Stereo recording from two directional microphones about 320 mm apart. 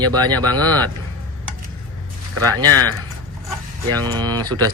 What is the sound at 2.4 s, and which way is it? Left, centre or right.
Speech, right.